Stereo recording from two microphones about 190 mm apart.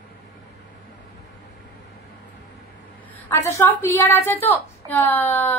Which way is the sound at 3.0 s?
10° left (ahead or behind).